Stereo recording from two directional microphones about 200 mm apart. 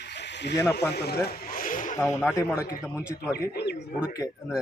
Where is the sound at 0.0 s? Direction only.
60° left (ahead or behind).